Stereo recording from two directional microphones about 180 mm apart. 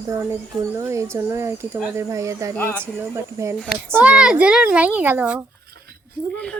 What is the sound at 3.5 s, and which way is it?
A woman's voice, centre (ahead or behind).